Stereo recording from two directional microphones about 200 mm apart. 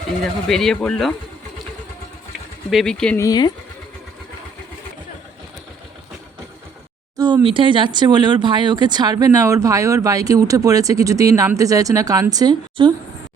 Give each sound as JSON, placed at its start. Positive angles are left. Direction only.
{"t": 0.2, "sound": "speech", "side_deg": 0}
{"t": 2.6, "sound": "speech", "side_deg": 0}
{"t": 3.2, "sound": "speech", "side_deg": 20}
{"t": 7.2, "sound": "speech", "side_deg": -20}